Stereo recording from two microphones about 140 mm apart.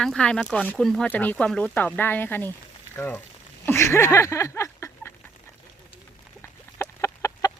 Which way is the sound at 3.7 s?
20° left (ahead or behind).